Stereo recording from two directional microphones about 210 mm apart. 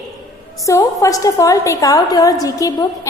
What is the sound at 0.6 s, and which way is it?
A woman's voice, 15° left (ahead or behind).